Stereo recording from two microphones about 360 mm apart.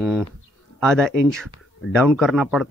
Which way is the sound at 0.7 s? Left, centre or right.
Centre.